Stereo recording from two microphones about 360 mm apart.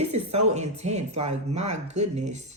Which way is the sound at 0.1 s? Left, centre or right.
Centre.